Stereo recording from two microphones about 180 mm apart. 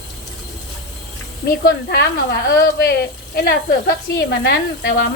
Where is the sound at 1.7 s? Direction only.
65° left (ahead or behind).